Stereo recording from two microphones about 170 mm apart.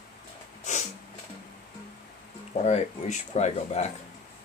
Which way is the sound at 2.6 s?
40° left (ahead or behind).